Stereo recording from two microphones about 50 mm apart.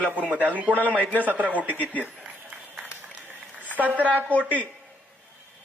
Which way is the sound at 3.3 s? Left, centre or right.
Right.